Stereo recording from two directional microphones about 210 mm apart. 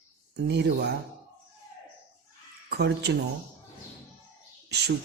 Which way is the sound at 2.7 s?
50° right (ahead or behind).